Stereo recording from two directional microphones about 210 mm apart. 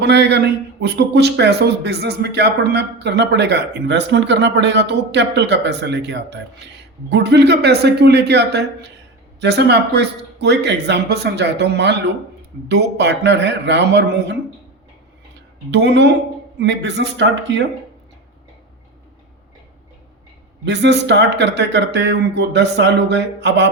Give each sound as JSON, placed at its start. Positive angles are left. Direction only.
{"t": 0.0, "sound": "a man's voice", "side_deg": -55}
{"t": 15.7, "sound": "a man's voice", "side_deg": -55}
{"t": 20.7, "sound": "a man's voice", "side_deg": -55}